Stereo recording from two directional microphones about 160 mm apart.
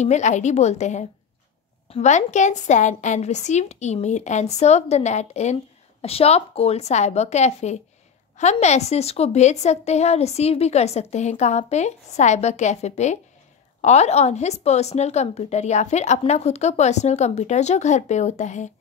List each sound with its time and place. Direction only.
0.0 s a woman's voice: 45° left (ahead or behind)